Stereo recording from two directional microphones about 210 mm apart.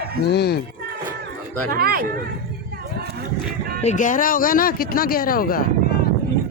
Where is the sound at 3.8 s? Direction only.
35° left (ahead or behind).